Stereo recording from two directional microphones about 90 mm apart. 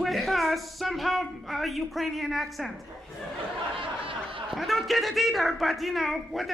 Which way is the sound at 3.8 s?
80° right.